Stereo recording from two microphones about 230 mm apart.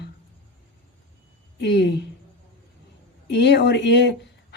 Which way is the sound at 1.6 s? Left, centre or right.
Left.